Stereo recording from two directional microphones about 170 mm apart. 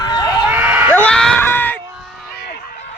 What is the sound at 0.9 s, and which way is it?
Screaming, 5° left (ahead or behind).